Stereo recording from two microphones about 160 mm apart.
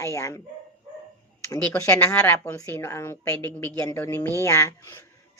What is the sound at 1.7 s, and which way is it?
A woman's voice, 20° left (ahead or behind).